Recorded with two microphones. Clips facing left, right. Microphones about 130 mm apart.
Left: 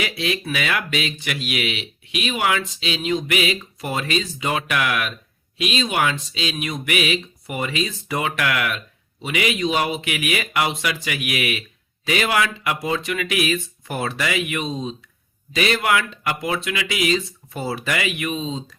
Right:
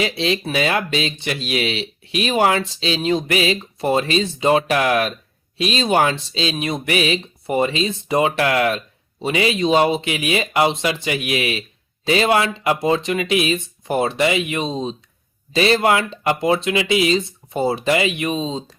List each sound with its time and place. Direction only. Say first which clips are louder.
0.0 s speech: right 4 dB; 30° right (ahead or behind)